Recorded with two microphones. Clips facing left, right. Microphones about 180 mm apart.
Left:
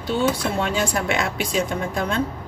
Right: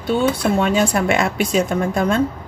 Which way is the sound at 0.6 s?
55° right (ahead or behind).